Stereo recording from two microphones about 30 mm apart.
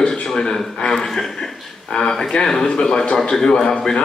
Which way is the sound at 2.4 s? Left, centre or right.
Centre.